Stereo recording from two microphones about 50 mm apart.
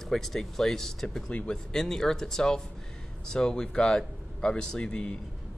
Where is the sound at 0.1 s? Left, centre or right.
Centre.